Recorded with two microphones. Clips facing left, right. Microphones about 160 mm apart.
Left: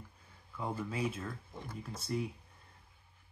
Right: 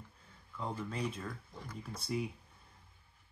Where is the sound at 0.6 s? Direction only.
10° left (ahead or behind).